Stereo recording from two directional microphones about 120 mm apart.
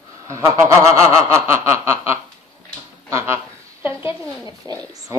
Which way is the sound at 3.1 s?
20° right (ahead or behind).